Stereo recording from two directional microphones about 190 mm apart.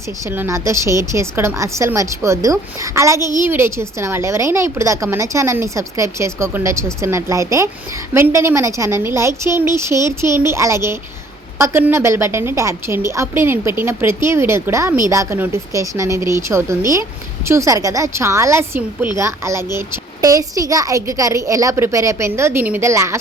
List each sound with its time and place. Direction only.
0.3 s a woman's voice: 15° right (ahead or behind)